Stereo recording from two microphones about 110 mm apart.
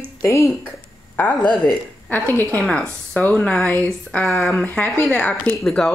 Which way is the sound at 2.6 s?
5° left (ahead or behind).